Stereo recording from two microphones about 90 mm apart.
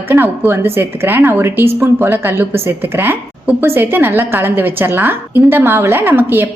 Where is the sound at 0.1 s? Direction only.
30° right (ahead or behind).